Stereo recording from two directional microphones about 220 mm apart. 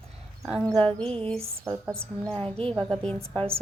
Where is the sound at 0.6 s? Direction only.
25° right (ahead or behind).